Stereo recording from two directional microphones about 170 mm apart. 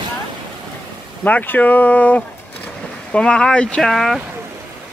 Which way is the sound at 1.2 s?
10° left (ahead or behind).